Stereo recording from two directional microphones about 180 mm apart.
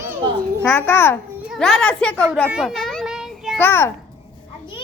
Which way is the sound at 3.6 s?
10° left (ahead or behind).